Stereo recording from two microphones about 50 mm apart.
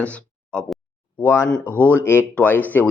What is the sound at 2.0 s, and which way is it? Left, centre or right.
Speech, left.